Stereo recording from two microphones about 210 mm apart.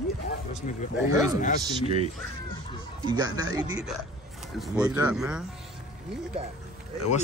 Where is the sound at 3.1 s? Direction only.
20° right (ahead or behind).